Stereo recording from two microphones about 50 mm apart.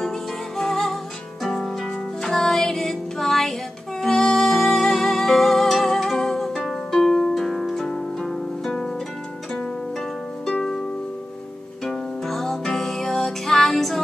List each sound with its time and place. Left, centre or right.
0.6 s music: centre
10.5 s harp: centre
11.8 s music: centre